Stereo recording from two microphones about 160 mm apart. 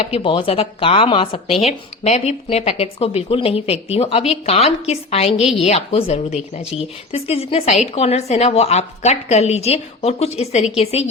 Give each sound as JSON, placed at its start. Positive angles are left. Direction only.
{"t": 0.0, "sound": "speech", "side_deg": 35}